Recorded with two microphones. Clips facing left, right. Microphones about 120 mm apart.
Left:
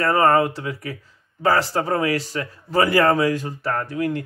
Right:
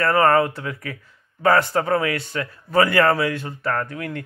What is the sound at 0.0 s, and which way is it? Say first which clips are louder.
Speech: even; 30° left (ahead or behind).